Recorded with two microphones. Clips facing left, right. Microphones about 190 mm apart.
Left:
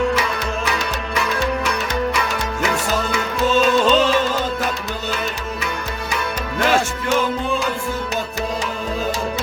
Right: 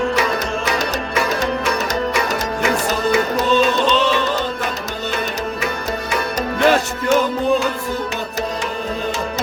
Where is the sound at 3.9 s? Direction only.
40° left (ahead or behind).